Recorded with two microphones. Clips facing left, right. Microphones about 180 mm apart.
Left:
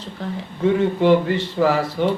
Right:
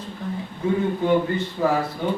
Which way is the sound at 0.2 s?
80° left.